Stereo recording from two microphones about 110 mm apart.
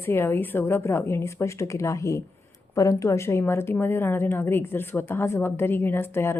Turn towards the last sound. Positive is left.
turn(degrees=20)  # may be behind; listen again after turning